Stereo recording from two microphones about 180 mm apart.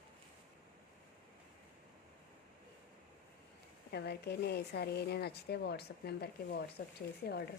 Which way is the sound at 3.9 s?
65° left (ahead or behind).